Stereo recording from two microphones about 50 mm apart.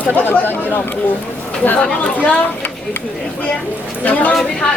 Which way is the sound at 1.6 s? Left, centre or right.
Left.